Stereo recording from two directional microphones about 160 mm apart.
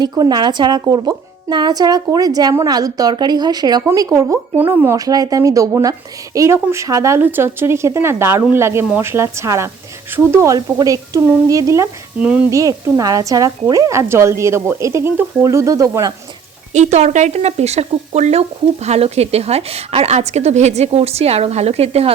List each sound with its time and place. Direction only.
0.0 s speech: 25° right (ahead or behind); by 12.5 s 10° right (ahead or behind)
12.5 s speech: 20° right (ahead or behind)
16.7 s speech: 45° right (ahead or behind)